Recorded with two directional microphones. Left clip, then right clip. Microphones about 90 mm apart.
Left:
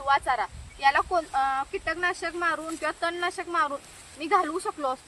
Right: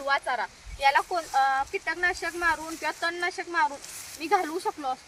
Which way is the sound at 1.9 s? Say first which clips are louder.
Even; 45° left (ahead or behind).